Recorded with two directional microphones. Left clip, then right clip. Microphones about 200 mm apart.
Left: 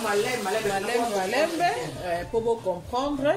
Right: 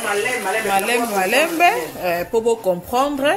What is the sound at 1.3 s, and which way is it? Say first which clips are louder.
Speech: right 10 dB; 50° right (ahead or behind).